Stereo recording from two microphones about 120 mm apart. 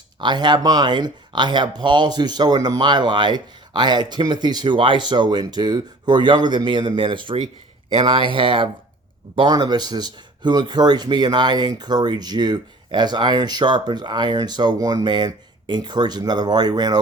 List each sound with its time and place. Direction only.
0.2 s speech: 40° right (ahead or behind)